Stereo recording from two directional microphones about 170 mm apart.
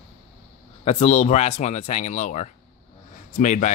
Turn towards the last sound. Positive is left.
turn(degrees=45)  # may be behind; listen again after turning